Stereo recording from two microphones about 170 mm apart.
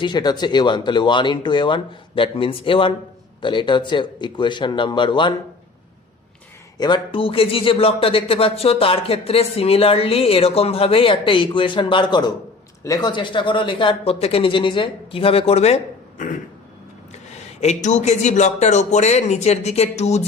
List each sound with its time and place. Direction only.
0.0 s speech: 25° left (ahead or behind)
6.7 s speech: 25° left (ahead or behind); by 16.4 s 50° left (ahead or behind)
17.8 s speech: 45° left (ahead or behind)